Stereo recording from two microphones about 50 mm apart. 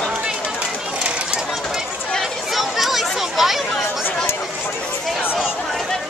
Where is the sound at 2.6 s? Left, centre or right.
Centre.